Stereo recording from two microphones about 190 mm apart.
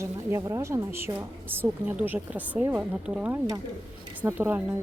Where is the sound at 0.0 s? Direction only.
15° right (ahead or behind).